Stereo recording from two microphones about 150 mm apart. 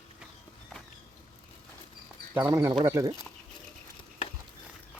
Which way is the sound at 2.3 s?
15° right (ahead or behind).